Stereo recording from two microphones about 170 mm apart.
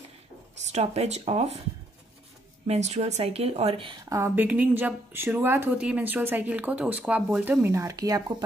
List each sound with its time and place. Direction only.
0.7 s a woman's voice: 40° right (ahead or behind)
2.6 s a woman's voice: 40° right (ahead or behind)
4.1 s speech: 15° right (ahead or behind)